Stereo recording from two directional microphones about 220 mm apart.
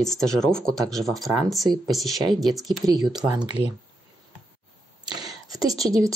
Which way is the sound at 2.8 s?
15° right (ahead or behind).